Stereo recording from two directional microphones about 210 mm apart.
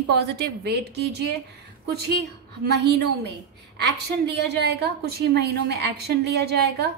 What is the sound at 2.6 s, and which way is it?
A woman's voice, 50° right (ahead or behind).